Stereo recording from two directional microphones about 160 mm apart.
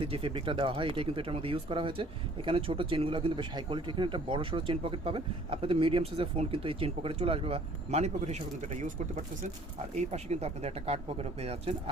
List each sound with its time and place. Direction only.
0.0 s speech: 35° right (ahead or behind)